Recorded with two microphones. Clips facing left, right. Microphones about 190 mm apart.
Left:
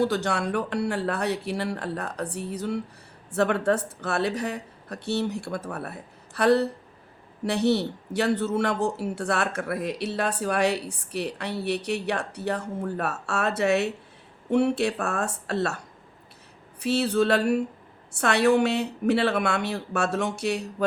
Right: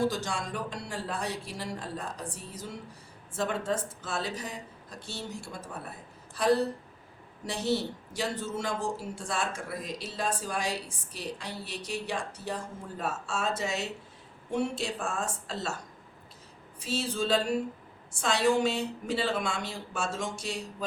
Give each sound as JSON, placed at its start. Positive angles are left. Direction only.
{"t": 0.0, "sound": "speech", "side_deg": 65}
{"t": 16.8, "sound": "speech", "side_deg": 65}